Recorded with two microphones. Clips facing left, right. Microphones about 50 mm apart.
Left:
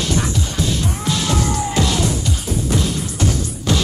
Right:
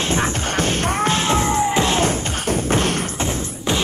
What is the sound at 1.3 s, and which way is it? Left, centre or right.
Music, right.